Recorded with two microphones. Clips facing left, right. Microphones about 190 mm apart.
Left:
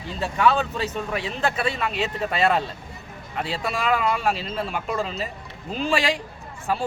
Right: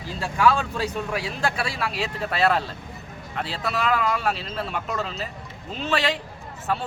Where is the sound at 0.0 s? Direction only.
Centre (ahead or behind).